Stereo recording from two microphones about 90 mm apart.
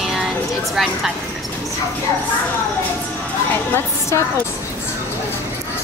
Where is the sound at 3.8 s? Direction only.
30° left (ahead or behind).